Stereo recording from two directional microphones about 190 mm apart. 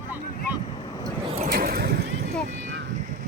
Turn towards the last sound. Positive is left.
turn(degrees=-45)  # may be behind; listen again after turning